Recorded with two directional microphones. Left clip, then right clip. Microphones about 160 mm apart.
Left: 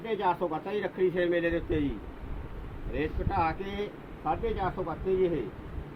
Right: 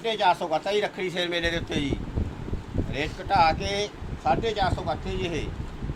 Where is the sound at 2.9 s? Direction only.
50° right (ahead or behind).